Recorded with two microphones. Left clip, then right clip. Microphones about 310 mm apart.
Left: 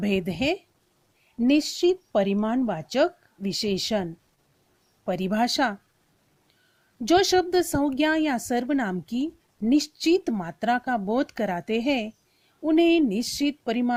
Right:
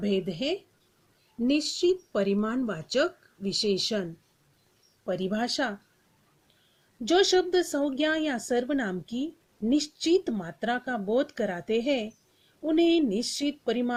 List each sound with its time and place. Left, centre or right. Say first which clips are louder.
0.0 s speech: left 3 dB; left
5.0 s speech: left 4 dB; left
7.2 s speech: even; left